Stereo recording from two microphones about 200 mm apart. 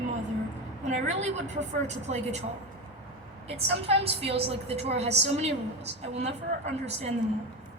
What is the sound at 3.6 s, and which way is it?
A woman's voice, 30° right (ahead or behind).